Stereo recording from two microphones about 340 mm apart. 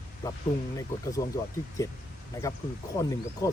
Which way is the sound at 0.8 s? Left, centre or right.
Centre.